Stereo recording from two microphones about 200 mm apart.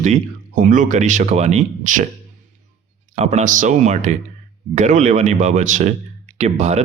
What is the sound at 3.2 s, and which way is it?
Speech, 35° right (ahead or behind).